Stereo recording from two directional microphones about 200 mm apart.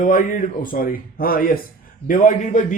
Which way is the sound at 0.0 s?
40° left (ahead or behind).